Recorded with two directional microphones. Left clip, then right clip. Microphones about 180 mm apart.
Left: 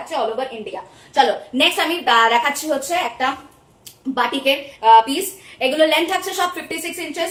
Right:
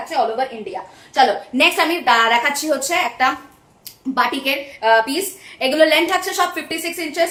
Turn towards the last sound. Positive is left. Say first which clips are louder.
# right 2 dB
turn(degrees=-20)  # may be behind; listen again after turning